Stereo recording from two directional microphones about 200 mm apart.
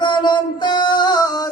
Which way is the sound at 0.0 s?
20° left (ahead or behind).